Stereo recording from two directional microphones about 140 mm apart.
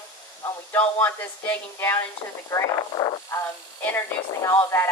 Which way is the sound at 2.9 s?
35° left (ahead or behind).